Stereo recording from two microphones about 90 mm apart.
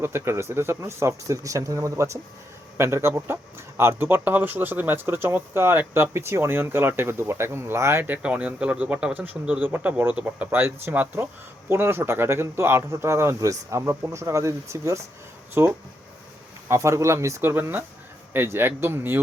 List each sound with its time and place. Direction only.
0.0 s speech: 30° right (ahead or behind)